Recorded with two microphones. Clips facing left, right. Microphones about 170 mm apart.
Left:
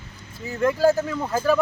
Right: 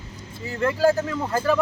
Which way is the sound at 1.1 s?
5° left (ahead or behind).